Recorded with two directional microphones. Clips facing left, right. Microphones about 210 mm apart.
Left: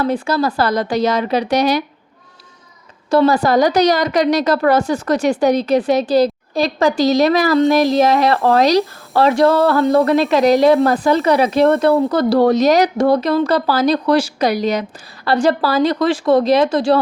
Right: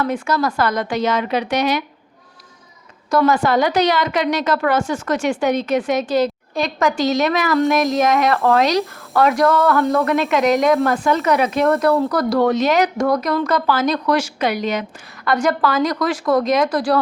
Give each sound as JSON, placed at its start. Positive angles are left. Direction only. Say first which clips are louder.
{"t": 0.0, "sound": "speech", "louder": "left 3 dB", "side_deg": 30}
{"t": 3.1, "sound": "speech", "louder": "left 3 dB", "side_deg": 30}